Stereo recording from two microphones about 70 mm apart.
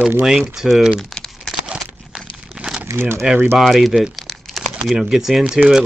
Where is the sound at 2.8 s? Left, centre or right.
Right.